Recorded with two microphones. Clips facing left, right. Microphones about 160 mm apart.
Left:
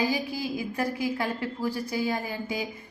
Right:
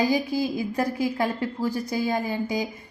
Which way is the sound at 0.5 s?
35° right (ahead or behind).